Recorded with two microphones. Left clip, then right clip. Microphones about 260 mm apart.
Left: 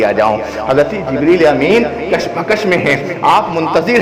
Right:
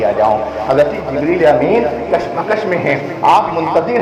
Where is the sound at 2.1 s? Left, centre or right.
Left.